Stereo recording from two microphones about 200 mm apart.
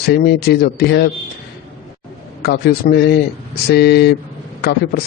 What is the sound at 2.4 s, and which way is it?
A man's voice, 50° left (ahead or behind).